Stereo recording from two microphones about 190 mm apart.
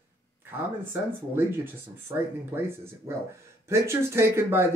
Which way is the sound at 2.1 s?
15° right (ahead or behind).